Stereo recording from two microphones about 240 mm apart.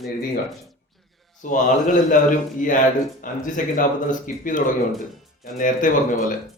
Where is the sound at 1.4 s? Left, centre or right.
Left.